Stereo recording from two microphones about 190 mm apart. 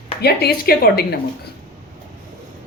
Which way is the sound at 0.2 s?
55° left (ahead or behind).